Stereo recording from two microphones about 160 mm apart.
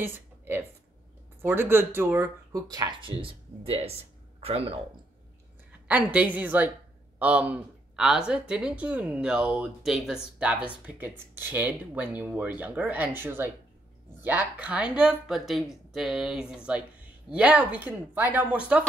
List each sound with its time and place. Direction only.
0.0 s speech: 15° right (ahead or behind); by 4.7 s 35° right (ahead or behind)
5.7 s a woman's voice: 10° right (ahead or behind)